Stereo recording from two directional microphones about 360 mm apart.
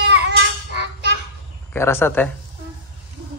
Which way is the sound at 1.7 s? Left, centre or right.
Centre.